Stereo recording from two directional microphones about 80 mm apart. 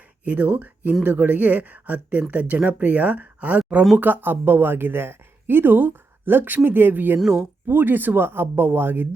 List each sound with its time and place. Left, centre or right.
0.3 s speech: right
7.2 s speech: centre
7.7 s speech: right